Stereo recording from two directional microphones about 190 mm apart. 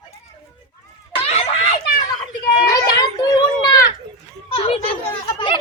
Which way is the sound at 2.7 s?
20° left (ahead or behind).